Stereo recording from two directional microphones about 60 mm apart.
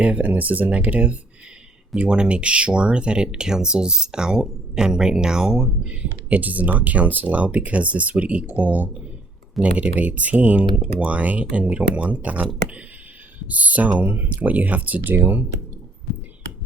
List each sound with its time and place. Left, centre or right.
0.0 s speech: right
13.5 s speech: right